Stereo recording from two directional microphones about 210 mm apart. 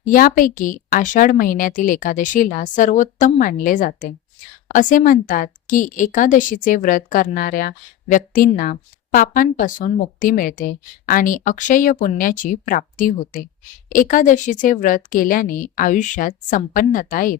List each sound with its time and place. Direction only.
0.0 s a woman's voice: 40° left (ahead or behind)